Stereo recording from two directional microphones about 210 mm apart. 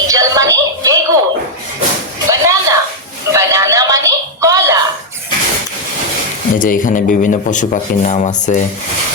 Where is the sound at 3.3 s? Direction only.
15° right (ahead or behind).